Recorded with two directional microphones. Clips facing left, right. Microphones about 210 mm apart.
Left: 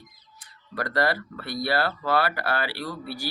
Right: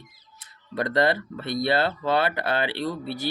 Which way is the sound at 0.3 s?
20° right (ahead or behind).